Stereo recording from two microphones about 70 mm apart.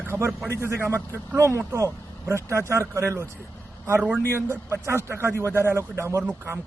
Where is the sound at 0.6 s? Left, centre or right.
Right.